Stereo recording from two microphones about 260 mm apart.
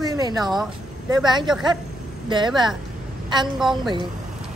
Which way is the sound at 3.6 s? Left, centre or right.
Centre.